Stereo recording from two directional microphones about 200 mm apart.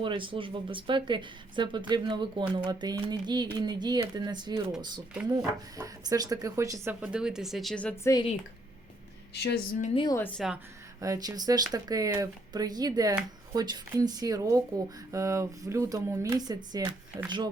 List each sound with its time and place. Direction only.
0.0 s speech: 25° right (ahead or behind)
7.0 s speech: 5° right (ahead or behind)
8.1 s a woman's voice: 25° left (ahead or behind)
9.3 s a woman's voice: 55° left (ahead or behind)
9.8 s a woman's voice: 25° left (ahead or behind)
10.2 s a woman's voice: 10° left (ahead or behind)
11.0 s speech: 15° right (ahead or behind)